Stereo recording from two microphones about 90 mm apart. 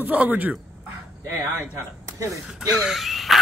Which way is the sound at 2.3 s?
5° right (ahead or behind).